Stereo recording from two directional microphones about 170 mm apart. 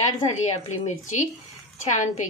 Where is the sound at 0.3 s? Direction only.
45° left (ahead or behind).